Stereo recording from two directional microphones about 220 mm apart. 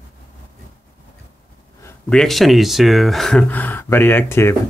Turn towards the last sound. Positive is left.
turn(degrees=10)  # may be behind; listen again after turning